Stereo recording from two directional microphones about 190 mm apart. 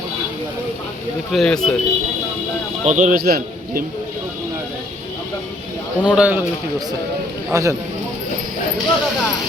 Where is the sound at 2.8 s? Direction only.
40° right (ahead or behind).